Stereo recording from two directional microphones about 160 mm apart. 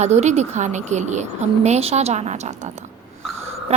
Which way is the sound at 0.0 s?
45° right (ahead or behind).